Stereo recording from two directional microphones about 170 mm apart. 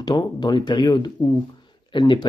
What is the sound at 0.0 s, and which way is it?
Speech, 25° left (ahead or behind).